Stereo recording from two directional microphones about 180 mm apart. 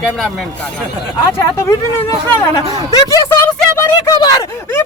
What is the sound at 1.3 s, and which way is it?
Speech, 15° left (ahead or behind).